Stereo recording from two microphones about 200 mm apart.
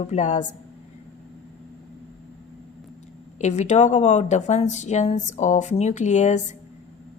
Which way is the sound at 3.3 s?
35° left (ahead or behind).